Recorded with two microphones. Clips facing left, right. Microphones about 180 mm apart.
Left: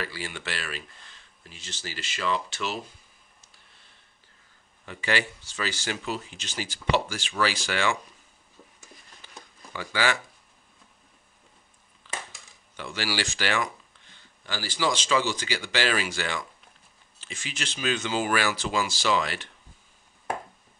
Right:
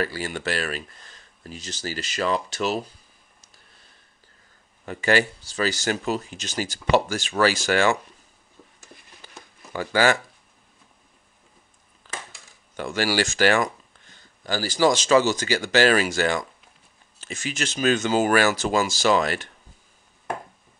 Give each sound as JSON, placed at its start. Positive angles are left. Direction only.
{"t": 0.0, "sound": "speech", "side_deg": -45}
{"t": 4.8, "sound": "speech", "side_deg": -45}
{"t": 9.2, "sound": "a sound", "side_deg": -40}
{"t": 9.7, "sound": "speech", "side_deg": -45}
{"t": 12.1, "sound": "coin", "side_deg": -45}
{"t": 12.7, "sound": "speech", "side_deg": -50}